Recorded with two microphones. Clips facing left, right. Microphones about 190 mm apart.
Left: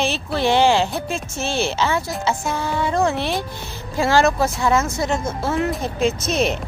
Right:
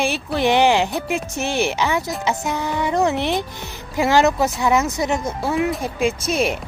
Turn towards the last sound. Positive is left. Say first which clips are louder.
# even
turn(degrees=-10)  # may be behind; listen again after turning